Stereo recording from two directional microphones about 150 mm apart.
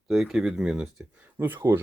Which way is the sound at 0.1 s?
5° right (ahead or behind).